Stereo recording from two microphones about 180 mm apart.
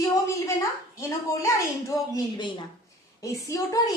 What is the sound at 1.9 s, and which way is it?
Speech, 20° left (ahead or behind).